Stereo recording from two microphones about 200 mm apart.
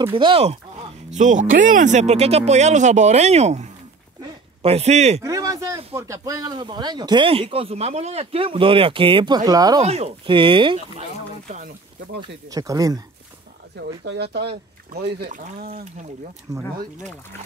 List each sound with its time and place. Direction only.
0.0 s speech: 25° right (ahead or behind)
5.2 s speech: 15° right (ahead or behind)
9.8 s speech: 30° right (ahead or behind)
12.4 s speech: 15° right (ahead or behind)
14.0 s speech: 55° right (ahead or behind)
15.7 s speech: 35° right (ahead or behind)
16.5 s speech: 15° right (ahead or behind)